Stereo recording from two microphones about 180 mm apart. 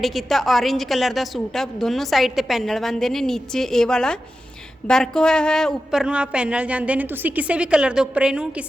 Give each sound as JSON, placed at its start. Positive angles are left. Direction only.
{"t": 0.0, "sound": "a woman's voice", "side_deg": 0}